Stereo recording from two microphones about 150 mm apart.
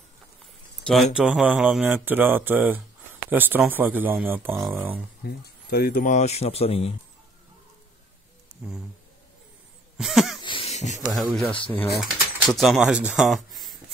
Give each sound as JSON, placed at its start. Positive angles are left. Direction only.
{"t": 0.8, "sound": "speech", "side_deg": -5}
{"t": 5.2, "sound": "speech", "side_deg": 90}
{"t": 8.6, "sound": "speech", "side_deg": -5}
{"t": 9.9, "sound": "cough", "side_deg": 0}
{"t": 10.4, "sound": "a sound", "side_deg": 35}
{"t": 10.7, "sound": "a sound", "side_deg": 50}
{"t": 11.0, "sound": "speech", "side_deg": 0}